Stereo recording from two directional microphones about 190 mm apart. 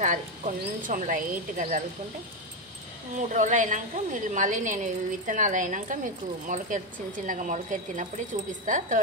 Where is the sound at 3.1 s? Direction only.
40° right (ahead or behind).